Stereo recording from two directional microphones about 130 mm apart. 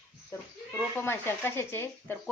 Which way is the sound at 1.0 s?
15° left (ahead or behind).